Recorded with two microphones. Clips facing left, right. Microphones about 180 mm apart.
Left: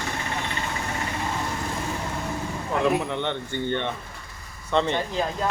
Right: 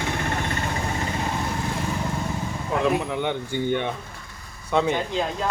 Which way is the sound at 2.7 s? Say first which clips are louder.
Even; centre (ahead or behind).